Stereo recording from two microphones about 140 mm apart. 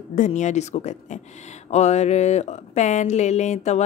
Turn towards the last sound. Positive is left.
turn(degrees=55)  # may be behind; listen again after turning